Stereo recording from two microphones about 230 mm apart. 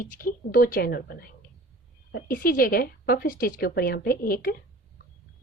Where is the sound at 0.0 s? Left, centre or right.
Left.